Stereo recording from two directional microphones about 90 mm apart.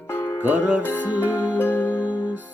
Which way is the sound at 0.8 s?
20° left (ahead or behind).